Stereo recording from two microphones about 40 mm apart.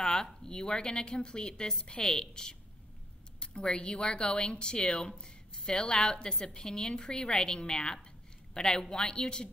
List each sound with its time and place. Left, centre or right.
0.0 s a woman's voice: centre